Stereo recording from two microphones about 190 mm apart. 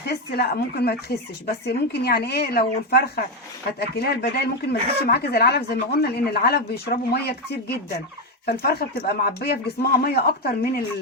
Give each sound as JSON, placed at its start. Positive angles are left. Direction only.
{"t": 0.1, "sound": "speech", "side_deg": 55}